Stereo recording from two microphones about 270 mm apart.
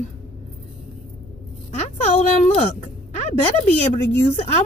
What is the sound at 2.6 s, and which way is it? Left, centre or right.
Speech, left.